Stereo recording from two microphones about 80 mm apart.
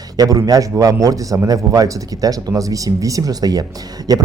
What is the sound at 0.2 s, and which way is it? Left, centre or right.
Speech, right.